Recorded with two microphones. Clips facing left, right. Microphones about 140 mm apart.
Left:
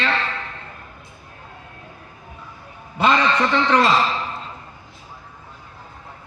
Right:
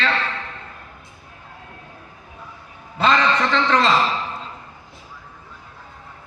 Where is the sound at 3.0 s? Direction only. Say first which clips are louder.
Even; 15° left (ahead or behind).